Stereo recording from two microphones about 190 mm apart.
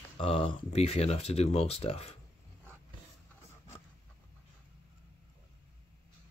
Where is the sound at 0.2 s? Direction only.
30° left (ahead or behind).